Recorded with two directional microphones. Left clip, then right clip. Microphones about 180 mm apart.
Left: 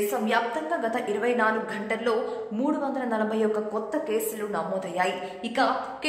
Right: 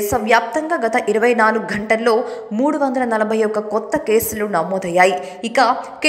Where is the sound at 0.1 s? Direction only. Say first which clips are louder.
Right 10 dB; 35° right (ahead or behind).